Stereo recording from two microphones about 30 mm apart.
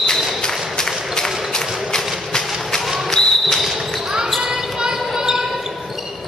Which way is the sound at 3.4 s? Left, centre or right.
Centre.